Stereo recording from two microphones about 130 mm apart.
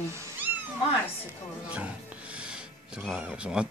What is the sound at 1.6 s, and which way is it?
Speech, 10° right (ahead or behind).